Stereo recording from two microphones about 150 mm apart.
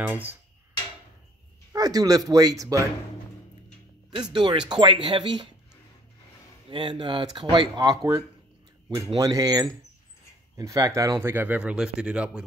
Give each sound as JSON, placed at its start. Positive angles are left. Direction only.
{"t": 0.0, "sound": "speech", "side_deg": -10}
{"t": 1.7, "sound": "speech", "side_deg": -25}
{"t": 4.1, "sound": "speech", "side_deg": -35}
{"t": 6.7, "sound": "speech", "side_deg": -30}